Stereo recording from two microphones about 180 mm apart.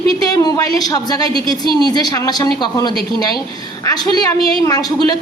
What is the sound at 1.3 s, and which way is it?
Speech, 25° right (ahead or behind).